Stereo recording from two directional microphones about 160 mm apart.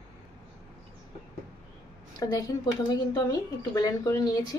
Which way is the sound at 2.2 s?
25° left (ahead or behind).